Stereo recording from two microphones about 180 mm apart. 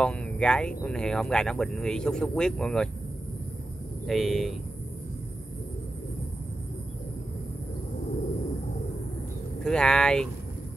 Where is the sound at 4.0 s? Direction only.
Centre (ahead or behind).